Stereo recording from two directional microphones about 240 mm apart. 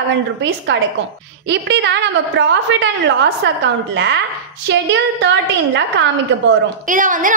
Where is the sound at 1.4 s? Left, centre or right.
Right.